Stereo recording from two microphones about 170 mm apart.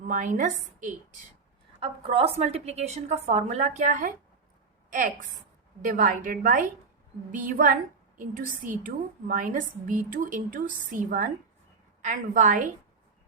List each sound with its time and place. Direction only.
0.0 s a woman's voice: 50° right (ahead or behind)
1.8 s a woman's voice: 35° right (ahead or behind); by 12.6 s 50° right (ahead or behind)